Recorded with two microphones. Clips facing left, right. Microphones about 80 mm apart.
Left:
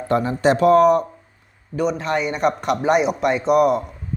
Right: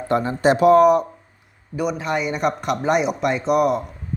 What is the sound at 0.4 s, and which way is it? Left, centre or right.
Speech, centre.